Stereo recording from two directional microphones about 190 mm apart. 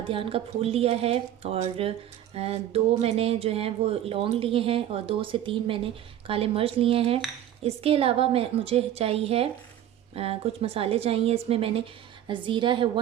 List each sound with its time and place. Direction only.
0.1 s a woman's voice: 30° right (ahead or behind)